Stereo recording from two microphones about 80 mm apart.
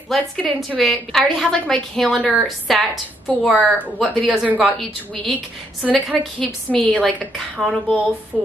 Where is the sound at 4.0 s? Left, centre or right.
Centre.